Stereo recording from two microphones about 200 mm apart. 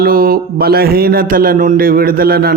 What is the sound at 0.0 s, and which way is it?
A man's voice, 45° right (ahead or behind).